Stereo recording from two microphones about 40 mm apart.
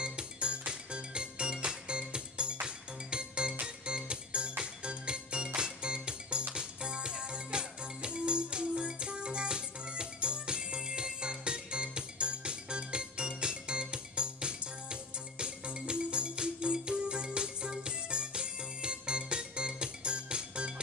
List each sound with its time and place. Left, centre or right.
0.0 s music: right